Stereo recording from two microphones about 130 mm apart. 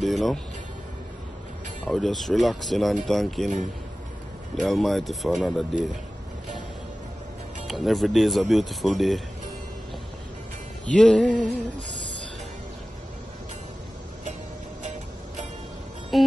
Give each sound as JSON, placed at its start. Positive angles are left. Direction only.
{"t": 0.0, "sound": "music", "side_deg": 0}
{"t": 1.9, "sound": "speech", "side_deg": 0}
{"t": 4.6, "sound": "speech", "side_deg": 0}
{"t": 7.6, "sound": "speech", "side_deg": 0}
{"t": 11.0, "sound": "speech", "side_deg": 5}
{"t": 14.8, "sound": "music", "side_deg": -65}